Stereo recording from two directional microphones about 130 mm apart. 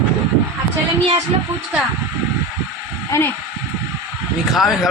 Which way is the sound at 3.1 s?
20° left (ahead or behind).